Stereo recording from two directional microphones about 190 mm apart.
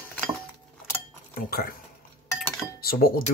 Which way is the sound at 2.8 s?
50° left (ahead or behind).